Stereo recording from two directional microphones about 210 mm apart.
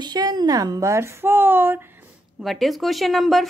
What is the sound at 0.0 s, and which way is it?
A woman's voice, 20° right (ahead or behind).